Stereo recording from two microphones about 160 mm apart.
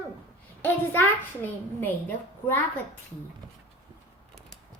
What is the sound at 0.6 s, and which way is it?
A child's voice, 10° left (ahead or behind).